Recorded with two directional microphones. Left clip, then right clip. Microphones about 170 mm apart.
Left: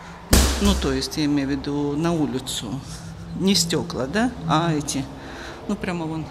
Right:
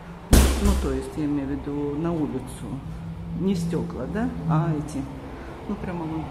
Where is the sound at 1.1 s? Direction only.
15° left (ahead or behind).